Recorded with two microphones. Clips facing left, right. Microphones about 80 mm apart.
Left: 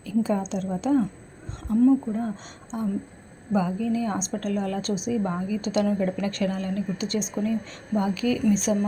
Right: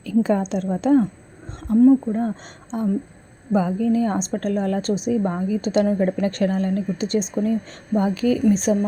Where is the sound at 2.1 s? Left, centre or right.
Right.